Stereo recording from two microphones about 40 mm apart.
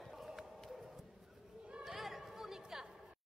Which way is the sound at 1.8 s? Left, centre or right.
Centre.